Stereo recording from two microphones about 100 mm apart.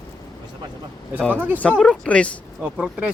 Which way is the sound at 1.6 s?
10° left (ahead or behind).